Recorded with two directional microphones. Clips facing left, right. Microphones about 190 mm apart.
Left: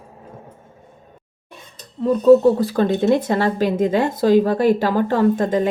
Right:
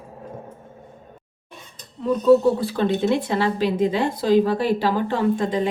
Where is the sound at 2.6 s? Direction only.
45° left (ahead or behind).